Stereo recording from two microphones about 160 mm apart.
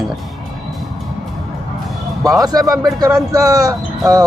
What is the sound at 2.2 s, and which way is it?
Speech, 20° right (ahead or behind).